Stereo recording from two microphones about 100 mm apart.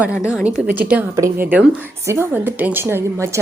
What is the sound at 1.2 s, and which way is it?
A woman's voice, 30° right (ahead or behind).